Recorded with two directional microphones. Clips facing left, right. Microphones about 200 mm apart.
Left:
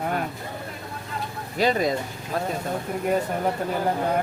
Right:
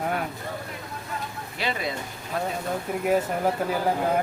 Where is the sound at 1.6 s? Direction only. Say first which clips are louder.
Left 8 dB; 40° left (ahead or behind).